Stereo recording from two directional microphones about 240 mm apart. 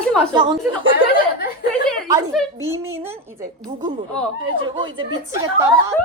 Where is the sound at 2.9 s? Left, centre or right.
Centre.